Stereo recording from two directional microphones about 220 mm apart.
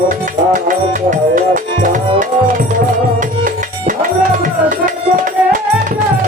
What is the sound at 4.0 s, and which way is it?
Music, 35° right (ahead or behind).